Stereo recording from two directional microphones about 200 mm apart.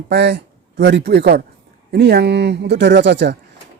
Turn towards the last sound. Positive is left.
turn(degrees=-60)  # may be behind; listen again after turning